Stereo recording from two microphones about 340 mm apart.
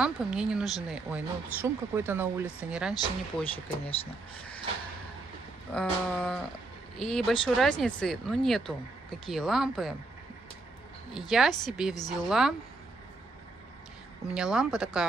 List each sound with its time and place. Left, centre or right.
0.0 s speech: centre
2.9 s speech: centre
5.7 s speech: centre
11.1 s speech: centre
14.2 s speech: centre